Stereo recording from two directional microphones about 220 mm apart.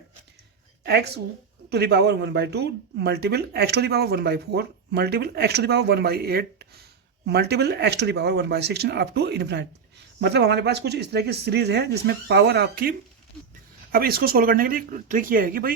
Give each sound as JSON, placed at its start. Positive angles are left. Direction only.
{"t": 0.9, "sound": "speech", "side_deg": -50}
{"t": 13.9, "sound": "speech", "side_deg": -40}